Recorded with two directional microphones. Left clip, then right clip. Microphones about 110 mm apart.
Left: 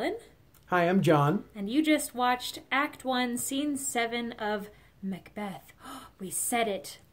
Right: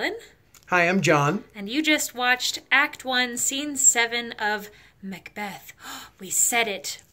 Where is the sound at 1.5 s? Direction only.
30° left (ahead or behind).